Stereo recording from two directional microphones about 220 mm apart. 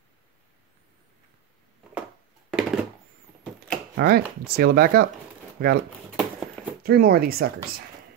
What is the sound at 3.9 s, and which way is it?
Speech, 45° right (ahead or behind).